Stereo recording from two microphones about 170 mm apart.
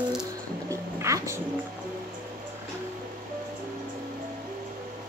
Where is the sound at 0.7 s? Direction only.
15° right (ahead or behind).